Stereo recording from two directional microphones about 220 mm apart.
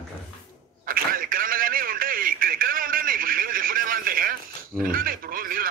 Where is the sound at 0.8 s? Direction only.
40° right (ahead or behind).